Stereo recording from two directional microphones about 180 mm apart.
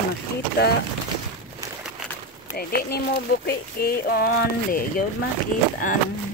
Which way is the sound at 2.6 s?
60° left (ahead or behind).